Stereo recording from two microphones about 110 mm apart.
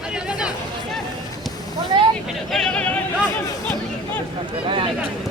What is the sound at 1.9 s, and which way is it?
Vehicle, 45° right (ahead or behind).